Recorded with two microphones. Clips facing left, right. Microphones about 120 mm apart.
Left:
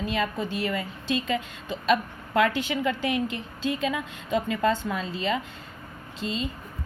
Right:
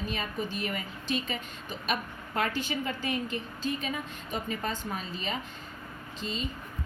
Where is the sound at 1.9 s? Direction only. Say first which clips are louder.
Left 9 dB; 90° left.